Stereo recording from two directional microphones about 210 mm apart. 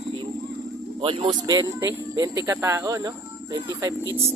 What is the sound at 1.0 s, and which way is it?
Speech, 25° right (ahead or behind).